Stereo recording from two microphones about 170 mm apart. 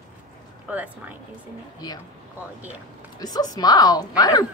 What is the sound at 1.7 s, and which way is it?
Speech, 20° left (ahead or behind).